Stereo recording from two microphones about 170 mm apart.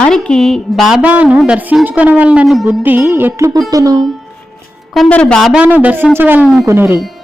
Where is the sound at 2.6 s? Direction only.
10° right (ahead or behind).